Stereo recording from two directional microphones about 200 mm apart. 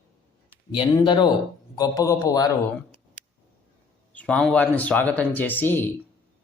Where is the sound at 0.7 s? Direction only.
25° left (ahead or behind).